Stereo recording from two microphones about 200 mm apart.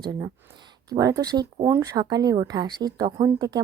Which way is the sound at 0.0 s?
20° right (ahead or behind).